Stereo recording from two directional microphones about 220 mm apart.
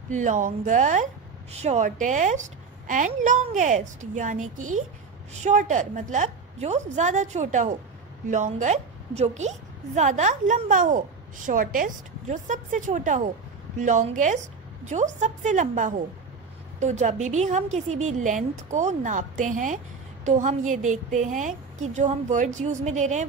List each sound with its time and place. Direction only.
0.1 s a woman's voice: 35° right (ahead or behind)
4.6 s a woman's voice: 75° right (ahead or behind)
5.4 s a woman's voice: 35° right (ahead or behind)